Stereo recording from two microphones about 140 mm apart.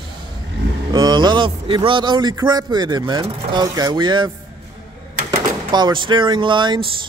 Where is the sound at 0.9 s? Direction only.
30° right (ahead or behind).